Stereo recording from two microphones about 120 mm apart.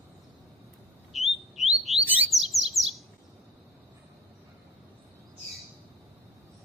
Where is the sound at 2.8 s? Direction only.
Centre (ahead or behind).